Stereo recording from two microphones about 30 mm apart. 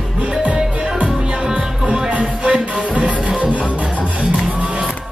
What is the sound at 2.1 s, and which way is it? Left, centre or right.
Music, right.